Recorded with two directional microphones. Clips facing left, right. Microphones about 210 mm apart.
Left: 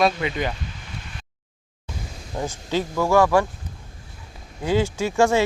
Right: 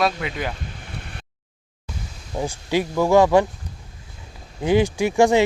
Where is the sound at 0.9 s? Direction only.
60° right (ahead or behind).